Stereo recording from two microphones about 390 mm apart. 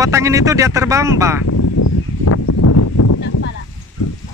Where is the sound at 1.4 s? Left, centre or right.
Left.